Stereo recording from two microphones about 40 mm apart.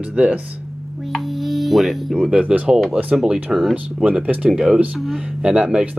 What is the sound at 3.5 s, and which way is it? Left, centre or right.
Speech, centre.